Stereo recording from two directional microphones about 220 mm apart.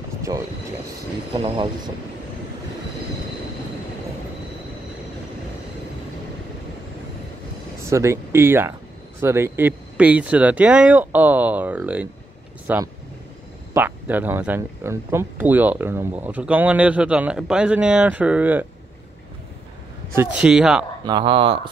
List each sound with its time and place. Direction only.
1.3 s speech: 25° right (ahead or behind)
7.9 s speech: 15° right (ahead or behind)
20.2 s speech: 5° right (ahead or behind)
21.0 s speech: 20° right (ahead or behind)